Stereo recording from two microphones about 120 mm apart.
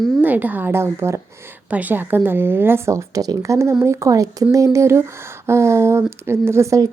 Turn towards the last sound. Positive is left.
turn(degrees=-25)  # may be behind; listen again after turning